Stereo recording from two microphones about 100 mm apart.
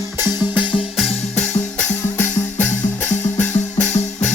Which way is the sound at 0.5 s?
55° left (ahead or behind).